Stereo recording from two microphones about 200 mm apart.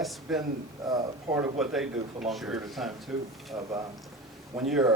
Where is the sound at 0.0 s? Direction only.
Centre (ahead or behind).